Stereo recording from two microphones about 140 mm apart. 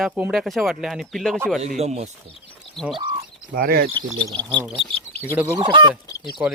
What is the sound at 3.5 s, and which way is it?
Speech, 90° right.